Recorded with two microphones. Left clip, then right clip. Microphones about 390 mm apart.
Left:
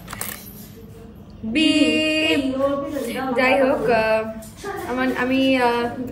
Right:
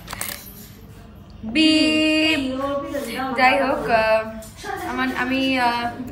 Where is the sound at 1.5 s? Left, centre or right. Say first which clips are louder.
Right 1 dB; centre.